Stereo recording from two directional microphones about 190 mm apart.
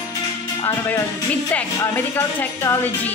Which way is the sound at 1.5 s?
10° left (ahead or behind).